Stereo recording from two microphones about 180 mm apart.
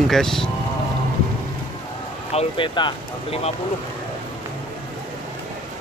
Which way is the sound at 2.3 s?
30° left (ahead or behind).